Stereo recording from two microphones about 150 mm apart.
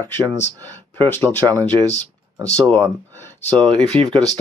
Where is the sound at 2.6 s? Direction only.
10° left (ahead or behind).